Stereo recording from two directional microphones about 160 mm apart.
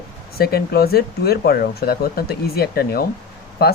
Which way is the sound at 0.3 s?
75° left (ahead or behind).